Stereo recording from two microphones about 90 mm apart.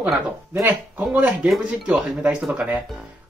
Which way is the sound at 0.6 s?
20° right (ahead or behind).